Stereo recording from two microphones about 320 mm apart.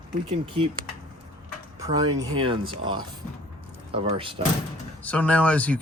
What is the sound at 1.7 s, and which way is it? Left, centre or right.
Speech, centre.